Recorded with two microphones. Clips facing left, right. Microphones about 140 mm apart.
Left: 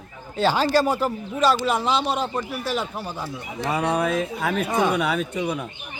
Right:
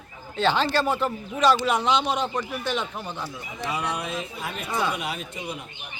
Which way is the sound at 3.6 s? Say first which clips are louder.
Left 7 dB; 50° left (ahead or behind).